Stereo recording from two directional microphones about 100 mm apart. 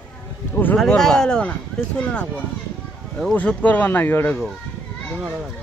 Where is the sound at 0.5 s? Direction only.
15° left (ahead or behind).